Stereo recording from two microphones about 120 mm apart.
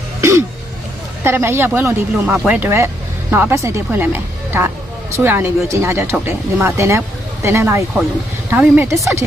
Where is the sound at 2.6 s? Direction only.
20° right (ahead or behind).